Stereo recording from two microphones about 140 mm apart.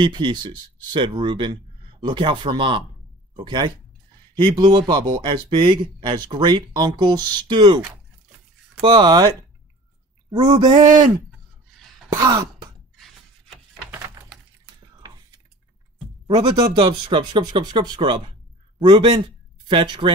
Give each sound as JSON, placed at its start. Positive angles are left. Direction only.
{"t": 0.0, "sound": "speech", "side_deg": -35}
{"t": 8.8, "sound": "speech", "side_deg": -35}
{"t": 10.3, "sound": "speech", "side_deg": -35}
{"t": 12.1, "sound": "throat clearing", "side_deg": -25}
{"t": 12.9, "sound": "a sound", "side_deg": 0}
{"t": 15.0, "sound": "a sound", "side_deg": -25}
{"t": 16.6, "sound": "speech", "side_deg": -40}